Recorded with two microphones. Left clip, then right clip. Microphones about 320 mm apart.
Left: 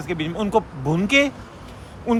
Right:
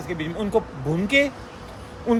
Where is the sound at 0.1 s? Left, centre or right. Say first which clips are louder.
Left 3 dB; centre.